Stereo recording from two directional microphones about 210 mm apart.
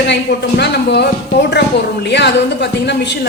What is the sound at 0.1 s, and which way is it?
A woman's voice, 55° left (ahead or behind).